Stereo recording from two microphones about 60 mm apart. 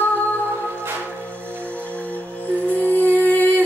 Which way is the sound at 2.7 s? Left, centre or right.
Left.